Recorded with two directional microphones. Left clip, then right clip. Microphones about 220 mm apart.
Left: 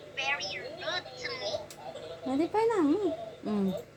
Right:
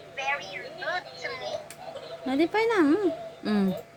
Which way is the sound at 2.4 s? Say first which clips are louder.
Right 4 dB; 35° right (ahead or behind).